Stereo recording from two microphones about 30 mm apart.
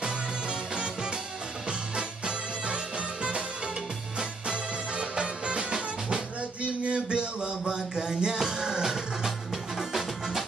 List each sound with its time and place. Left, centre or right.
0.0 s music: right
6.6 s music: right; by 10.4 s centre